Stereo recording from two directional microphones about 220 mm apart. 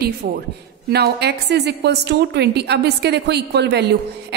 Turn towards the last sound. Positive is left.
turn(degrees=-50)  # may be behind; listen again after turning